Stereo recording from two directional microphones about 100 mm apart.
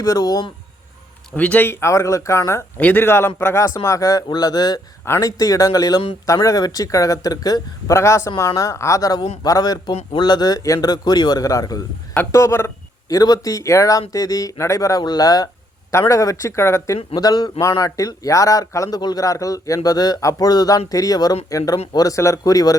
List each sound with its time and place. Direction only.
0.0 s speech: 40° left (ahead or behind)
1.4 s speech: 15° left (ahead or behind); by 4.8 s 40° left (ahead or behind)
5.0 s speech: 25° left (ahead or behind)
7.9 s speech: 30° left (ahead or behind)
9.9 s speech: 90° left
10.2 s speech: 45° left (ahead or behind)
15.9 s speech: 30° left (ahead or behind)
17.2 s speech: 40° left (ahead or behind)
17.6 s speech: 30° left (ahead or behind)